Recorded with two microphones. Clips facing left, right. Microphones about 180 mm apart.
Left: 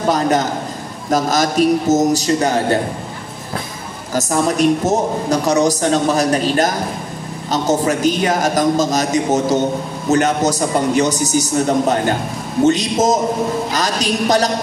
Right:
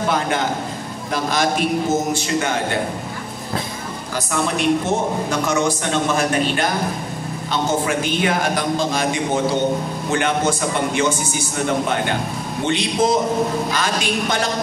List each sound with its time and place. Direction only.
0.1 s a woman's voice: 40° left (ahead or behind)
4.1 s a woman's voice: 40° left (ahead or behind)